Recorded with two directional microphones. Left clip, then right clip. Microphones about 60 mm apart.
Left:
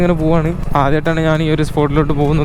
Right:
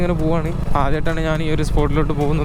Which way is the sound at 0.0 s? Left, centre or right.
Left.